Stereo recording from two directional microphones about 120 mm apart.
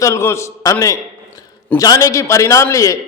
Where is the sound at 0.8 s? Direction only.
25° left (ahead or behind).